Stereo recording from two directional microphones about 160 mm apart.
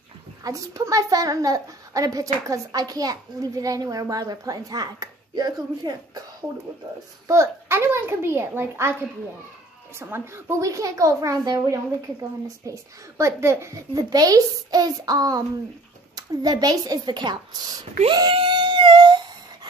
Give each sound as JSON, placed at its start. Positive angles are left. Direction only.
{"t": 0.4, "sound": "a child's voice", "side_deg": -20}
{"t": 7.2, "sound": "a child's voice", "side_deg": -15}
{"t": 9.9, "sound": "a child's voice", "side_deg": -15}
{"t": 18.1, "sound": "a sound", "side_deg": -30}